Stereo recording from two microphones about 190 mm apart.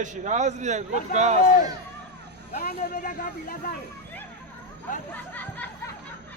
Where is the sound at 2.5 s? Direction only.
45° left (ahead or behind).